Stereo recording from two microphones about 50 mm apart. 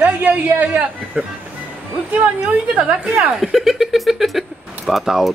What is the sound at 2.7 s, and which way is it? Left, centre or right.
Speech, right.